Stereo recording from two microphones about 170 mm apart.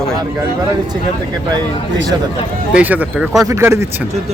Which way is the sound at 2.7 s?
10° right (ahead or behind).